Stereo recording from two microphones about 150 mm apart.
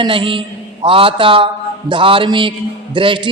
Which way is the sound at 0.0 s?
35° right (ahead or behind).